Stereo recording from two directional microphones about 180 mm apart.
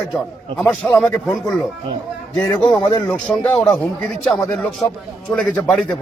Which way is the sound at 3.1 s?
5° left (ahead or behind).